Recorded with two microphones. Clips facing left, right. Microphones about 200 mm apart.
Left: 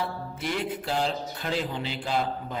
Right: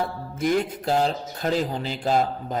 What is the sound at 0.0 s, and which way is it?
Speech, 45° right (ahead or behind).